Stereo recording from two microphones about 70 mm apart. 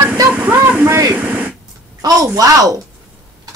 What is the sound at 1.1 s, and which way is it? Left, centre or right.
Radio, right.